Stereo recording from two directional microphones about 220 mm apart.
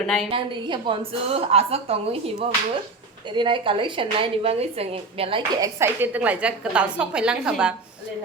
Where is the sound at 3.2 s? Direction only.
20° right (ahead or behind).